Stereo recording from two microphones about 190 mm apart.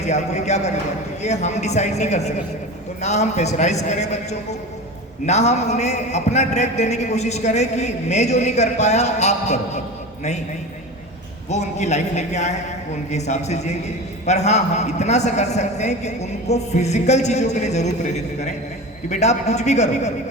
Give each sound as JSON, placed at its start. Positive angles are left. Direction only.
{"t": 0.0, "sound": "a man's voice", "side_deg": 35}
{"t": 11.4, "sound": "a man's voice", "side_deg": 35}